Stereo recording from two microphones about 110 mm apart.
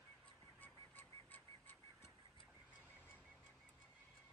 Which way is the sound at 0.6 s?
15° left (ahead or behind).